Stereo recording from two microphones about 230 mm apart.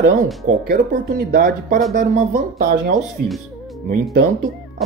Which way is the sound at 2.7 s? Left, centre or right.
Right.